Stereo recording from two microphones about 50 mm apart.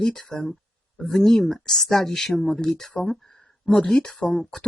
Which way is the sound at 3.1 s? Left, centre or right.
Centre.